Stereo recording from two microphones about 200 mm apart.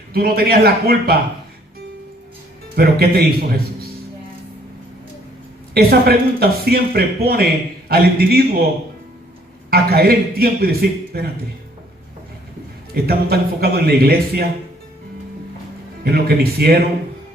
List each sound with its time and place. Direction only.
0.1 s speech: 50° right (ahead or behind)
2.7 s speech: 50° right (ahead or behind)
5.7 s speech: 50° right (ahead or behind)
9.6 s speech: 50° right (ahead or behind)
12.9 s speech: 50° right (ahead or behind)
16.0 s speech: 50° right (ahead or behind)